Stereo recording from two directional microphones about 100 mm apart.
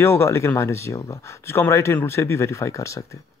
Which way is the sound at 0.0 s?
25° left (ahead or behind).